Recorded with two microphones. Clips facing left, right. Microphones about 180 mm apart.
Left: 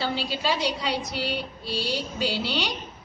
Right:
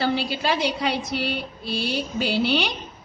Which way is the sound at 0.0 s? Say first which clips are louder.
Right 4 dB; 60° right (ahead or behind).